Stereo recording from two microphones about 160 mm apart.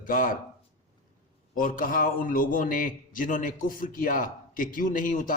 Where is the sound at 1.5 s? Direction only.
55° left (ahead or behind).